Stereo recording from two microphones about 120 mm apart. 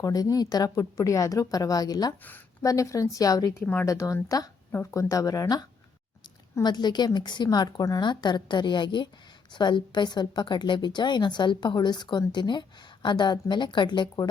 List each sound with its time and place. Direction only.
0.0 s a woman's voice: 30° left (ahead or behind)